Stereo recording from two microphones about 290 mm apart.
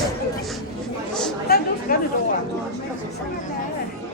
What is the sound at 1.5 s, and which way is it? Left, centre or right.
Chatter, left.